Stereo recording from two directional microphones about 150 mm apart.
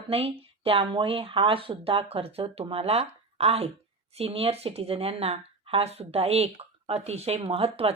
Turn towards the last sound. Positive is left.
turn(degrees=-40)  # may be behind; listen again after turning